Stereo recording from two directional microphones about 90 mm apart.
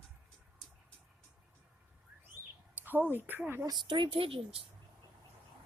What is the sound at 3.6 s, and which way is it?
Speech, 50° right (ahead or behind).